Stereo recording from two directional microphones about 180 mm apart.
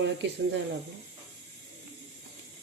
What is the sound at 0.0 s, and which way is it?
Speech, 80° right.